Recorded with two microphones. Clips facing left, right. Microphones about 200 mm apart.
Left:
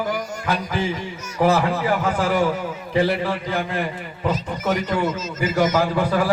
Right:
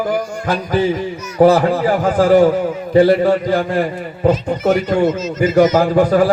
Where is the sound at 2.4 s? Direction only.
45° right (ahead or behind).